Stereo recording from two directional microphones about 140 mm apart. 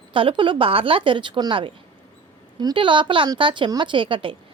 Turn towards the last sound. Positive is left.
turn(degrees=-40)  # may be behind; listen again after turning